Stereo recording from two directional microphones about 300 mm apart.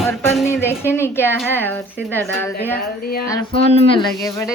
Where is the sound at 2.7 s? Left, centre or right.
Left.